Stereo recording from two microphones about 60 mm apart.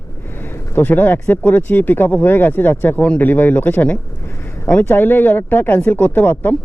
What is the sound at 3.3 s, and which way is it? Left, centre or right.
Speech, left.